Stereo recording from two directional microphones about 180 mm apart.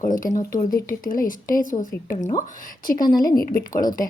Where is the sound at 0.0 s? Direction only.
45° left (ahead or behind).